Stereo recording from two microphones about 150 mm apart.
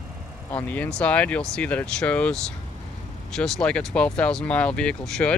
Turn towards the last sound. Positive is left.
turn(degrees=5)  # may be behind; listen again after turning